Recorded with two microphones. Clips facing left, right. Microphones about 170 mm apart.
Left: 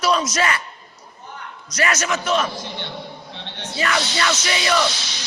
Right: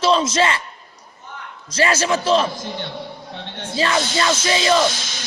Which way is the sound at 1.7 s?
30° right (ahead or behind).